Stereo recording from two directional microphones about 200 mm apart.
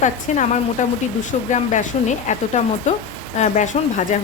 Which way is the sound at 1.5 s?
35° left (ahead or behind).